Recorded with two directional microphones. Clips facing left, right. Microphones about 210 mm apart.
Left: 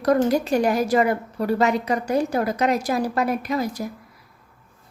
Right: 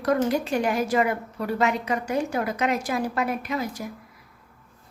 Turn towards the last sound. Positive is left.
turn(degrees=40)  # may be behind; listen again after turning